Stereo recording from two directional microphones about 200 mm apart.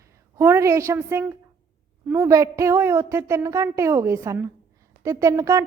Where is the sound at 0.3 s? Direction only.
15° right (ahead or behind).